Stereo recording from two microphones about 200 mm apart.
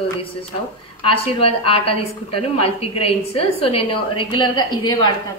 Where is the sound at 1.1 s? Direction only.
30° left (ahead or behind).